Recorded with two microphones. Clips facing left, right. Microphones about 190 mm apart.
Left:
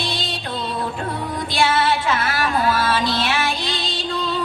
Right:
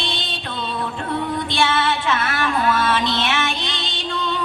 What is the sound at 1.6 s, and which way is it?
Music, 30° left (ahead or behind).